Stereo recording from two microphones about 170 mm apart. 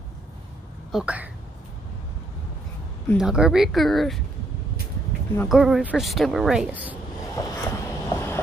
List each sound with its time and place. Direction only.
0.9 s speech: 10° right (ahead or behind)
3.2 s a woman's voice: 5° right (ahead or behind)
5.5 s a woman's voice: 5° right (ahead or behind)
7.3 s a sound: 20° left (ahead or behind)